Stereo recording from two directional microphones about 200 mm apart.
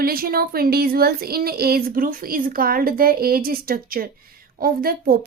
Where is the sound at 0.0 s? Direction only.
50° right (ahead or behind).